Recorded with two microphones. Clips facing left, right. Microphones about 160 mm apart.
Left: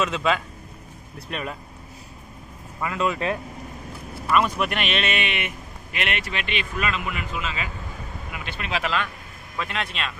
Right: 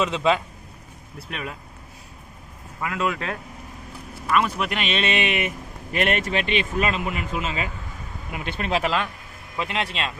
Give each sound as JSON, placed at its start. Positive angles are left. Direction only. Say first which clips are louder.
{"t": 0.0, "sound": "speech", "louder": "right 2 dB", "side_deg": -20}
{"t": 1.3, "sound": "a man's voice", "louder": "left 2 dB", "side_deg": -5}
{"t": 2.8, "sound": "a man's voice", "louder": "left 1 dB", "side_deg": -5}
{"t": 4.4, "sound": "speech", "louder": "left 1 dB", "side_deg": -10}
{"t": 4.9, "sound": "speech", "louder": "right 3 dB", "side_deg": -35}
{"t": 9.6, "sound": "speech", "louder": "right 2 dB", "side_deg": -20}